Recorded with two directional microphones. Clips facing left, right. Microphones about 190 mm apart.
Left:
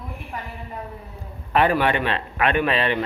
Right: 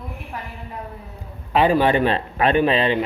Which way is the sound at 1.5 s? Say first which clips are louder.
Right 2 dB; 15° right (ahead or behind).